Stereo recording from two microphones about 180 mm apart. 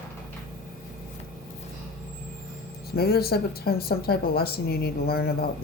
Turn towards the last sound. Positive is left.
turn(degrees=55)  # may be behind; listen again after turning